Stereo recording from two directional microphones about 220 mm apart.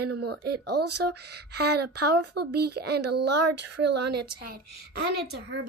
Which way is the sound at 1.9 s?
90° right.